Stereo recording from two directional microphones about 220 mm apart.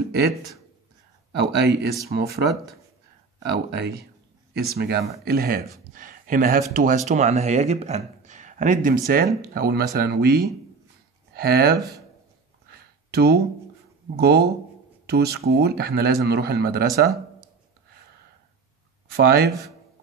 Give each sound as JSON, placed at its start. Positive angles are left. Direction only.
{"t": 1.3, "sound": "speech", "side_deg": -50}
{"t": 13.1, "sound": "speech", "side_deg": -45}
{"t": 19.0, "sound": "speech", "side_deg": -45}